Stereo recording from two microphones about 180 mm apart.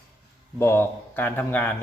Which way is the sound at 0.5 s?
15° left (ahead or behind).